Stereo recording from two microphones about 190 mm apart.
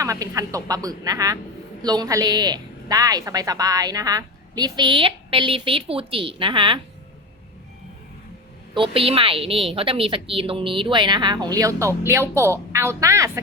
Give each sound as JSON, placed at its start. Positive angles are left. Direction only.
{"t": 0.0, "sound": "speech", "side_deg": -15}
{"t": 8.7, "sound": "speech", "side_deg": -30}